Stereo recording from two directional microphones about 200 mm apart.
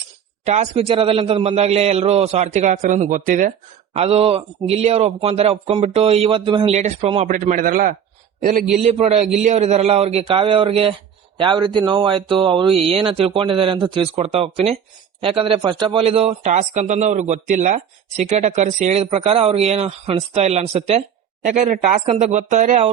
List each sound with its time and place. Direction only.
0.4 s a man's voice: 35° right (ahead or behind)